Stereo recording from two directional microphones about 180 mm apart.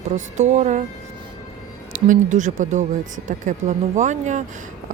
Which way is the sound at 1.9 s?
45° right (ahead or behind).